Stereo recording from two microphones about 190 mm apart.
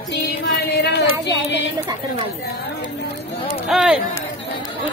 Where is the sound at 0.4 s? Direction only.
60° left (ahead or behind).